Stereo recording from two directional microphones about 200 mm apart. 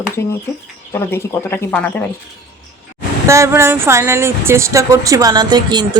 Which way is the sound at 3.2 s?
15° right (ahead or behind).